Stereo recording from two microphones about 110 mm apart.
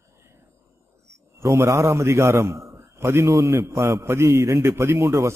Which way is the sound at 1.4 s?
25° right (ahead or behind).